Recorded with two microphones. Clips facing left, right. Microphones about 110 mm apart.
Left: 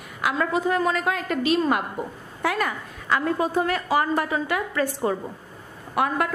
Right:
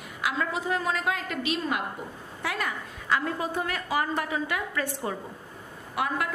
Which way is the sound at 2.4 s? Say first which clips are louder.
Left 6 dB; 55° left (ahead or behind).